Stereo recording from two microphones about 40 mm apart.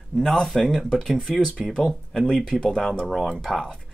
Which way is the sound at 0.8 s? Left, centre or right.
Centre.